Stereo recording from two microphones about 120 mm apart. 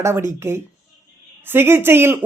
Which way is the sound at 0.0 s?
20° right (ahead or behind).